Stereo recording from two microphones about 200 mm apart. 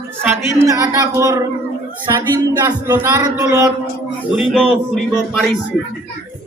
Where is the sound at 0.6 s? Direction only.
15° right (ahead or behind).